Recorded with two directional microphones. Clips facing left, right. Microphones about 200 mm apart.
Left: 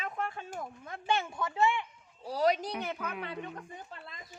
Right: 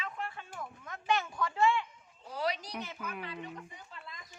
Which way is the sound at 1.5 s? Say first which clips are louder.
Even; 20° left (ahead or behind).